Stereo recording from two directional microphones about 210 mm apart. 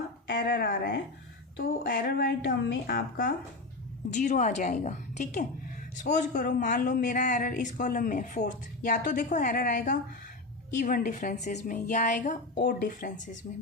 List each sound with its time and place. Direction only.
0.3 s a woman's voice: 50° left (ahead or behind)